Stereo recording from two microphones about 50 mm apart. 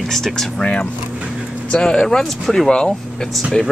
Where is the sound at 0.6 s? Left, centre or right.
Left.